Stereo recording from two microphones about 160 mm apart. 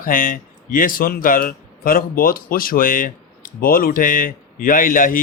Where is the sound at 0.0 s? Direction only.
60° left (ahead or behind).